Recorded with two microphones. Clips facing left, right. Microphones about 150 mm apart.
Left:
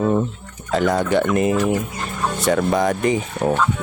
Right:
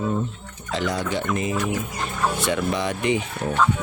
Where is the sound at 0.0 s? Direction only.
65° left (ahead or behind).